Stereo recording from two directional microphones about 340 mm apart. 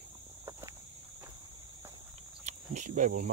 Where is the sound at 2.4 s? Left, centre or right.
Right.